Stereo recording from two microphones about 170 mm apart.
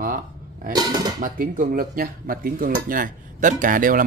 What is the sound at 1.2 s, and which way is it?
Speech, 55° right (ahead or behind).